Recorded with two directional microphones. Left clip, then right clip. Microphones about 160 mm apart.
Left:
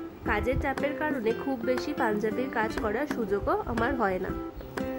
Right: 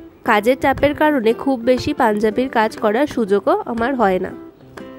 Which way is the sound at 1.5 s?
50° right (ahead or behind).